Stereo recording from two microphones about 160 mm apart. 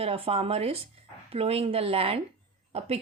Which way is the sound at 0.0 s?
35° right (ahead or behind).